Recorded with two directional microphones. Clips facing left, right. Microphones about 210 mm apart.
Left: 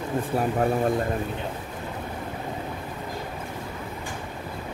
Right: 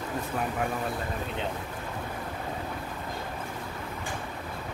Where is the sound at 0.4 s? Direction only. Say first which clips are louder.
Left 8 dB; 40° left (ahead or behind).